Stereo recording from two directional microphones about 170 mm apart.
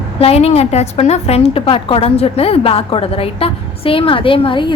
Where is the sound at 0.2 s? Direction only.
35° left (ahead or behind).